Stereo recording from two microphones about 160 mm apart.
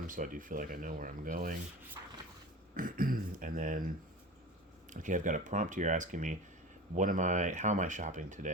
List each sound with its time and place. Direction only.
0.1 s speech: 55° right (ahead or behind)
2.7 s speech: 60° right (ahead or behind)